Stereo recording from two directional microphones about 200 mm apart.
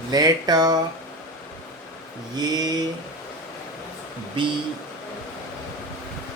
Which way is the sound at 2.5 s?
20° right (ahead or behind).